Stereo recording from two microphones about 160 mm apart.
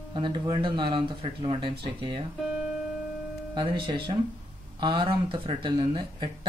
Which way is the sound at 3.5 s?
30° right (ahead or behind).